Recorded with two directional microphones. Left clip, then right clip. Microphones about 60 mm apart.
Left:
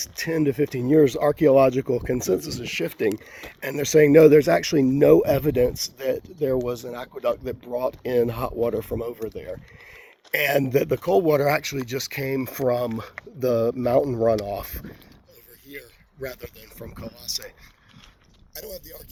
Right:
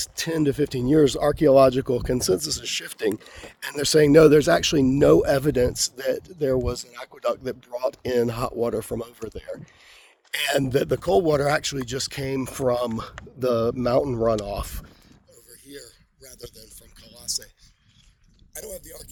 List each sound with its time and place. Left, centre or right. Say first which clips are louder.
0.2 s speech: left 1 dB; right
1.8 s speech: even; right
2.1 s speech: right 1 dB; right
3.6 s speech: left 1 dB; right
10.3 s speech: left 2 dB; right
11.3 s speech: left 1 dB; centre
14.0 s speech: left 1 dB; centre
14.4 s speech: left 1 dB; centre
16.2 s speech: left 8 dB; centre
17.2 s speech: right 1 dB; centre